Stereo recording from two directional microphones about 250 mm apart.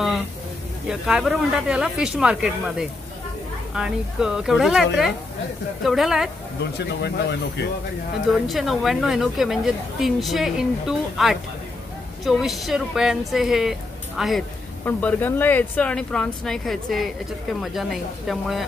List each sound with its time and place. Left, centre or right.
0.8 s speech: centre
7.0 s speech: left
8.5 s speech: centre